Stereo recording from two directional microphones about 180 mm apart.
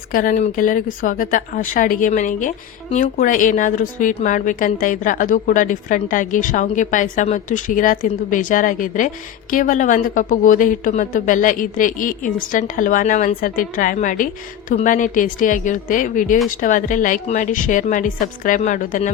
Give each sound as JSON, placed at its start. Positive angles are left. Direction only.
{"t": 0.1, "sound": "speech", "side_deg": 50}